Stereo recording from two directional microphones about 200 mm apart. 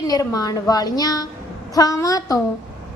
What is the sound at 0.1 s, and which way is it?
A woman's voice, 20° left (ahead or behind).